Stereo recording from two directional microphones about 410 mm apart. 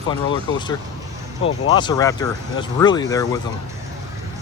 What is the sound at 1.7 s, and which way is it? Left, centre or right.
Speech, centre.